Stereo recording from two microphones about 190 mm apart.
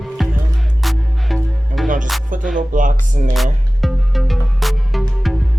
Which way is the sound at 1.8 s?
45° right (ahead or behind).